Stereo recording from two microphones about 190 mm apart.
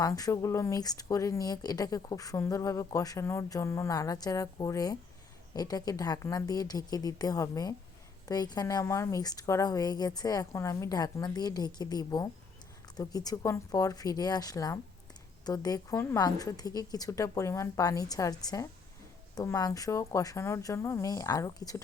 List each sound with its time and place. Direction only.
0.0 s a woman's voice: 20° left (ahead or behind)